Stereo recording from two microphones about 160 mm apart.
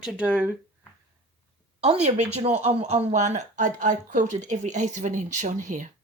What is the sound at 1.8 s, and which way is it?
A woman's voice, 45° right (ahead or behind).